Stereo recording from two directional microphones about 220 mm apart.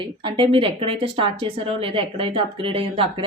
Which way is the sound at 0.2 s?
20° right (ahead or behind).